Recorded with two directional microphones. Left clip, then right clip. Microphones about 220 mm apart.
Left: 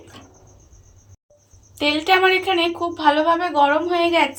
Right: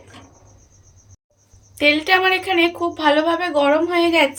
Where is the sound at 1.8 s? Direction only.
5° right (ahead or behind).